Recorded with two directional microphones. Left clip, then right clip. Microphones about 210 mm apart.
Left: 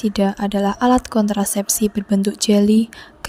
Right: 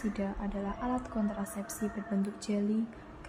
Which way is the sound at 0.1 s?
50° left (ahead or behind).